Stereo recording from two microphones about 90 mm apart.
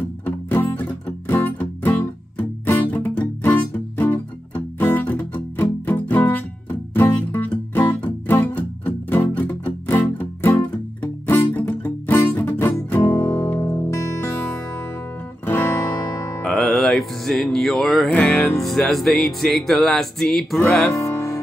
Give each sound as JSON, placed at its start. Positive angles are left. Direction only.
{"t": 0.2, "sound": "music", "side_deg": 20}
{"t": 13.6, "sound": "music", "side_deg": 30}
{"t": 16.4, "sound": "music", "side_deg": 0}
{"t": 18.6, "sound": "music", "side_deg": 0}
{"t": 21.0, "sound": "music", "side_deg": 35}